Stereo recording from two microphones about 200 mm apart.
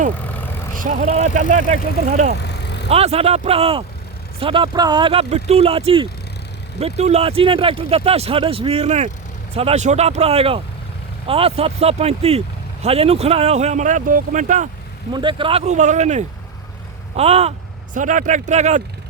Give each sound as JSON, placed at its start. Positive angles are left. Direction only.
{"t": 0.3, "sound": "vehicle", "side_deg": 10}
{"t": 0.8, "sound": "speech", "side_deg": -40}
{"t": 15.1, "sound": "speech", "side_deg": -25}